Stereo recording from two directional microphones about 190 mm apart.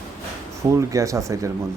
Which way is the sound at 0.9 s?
15° right (ahead or behind).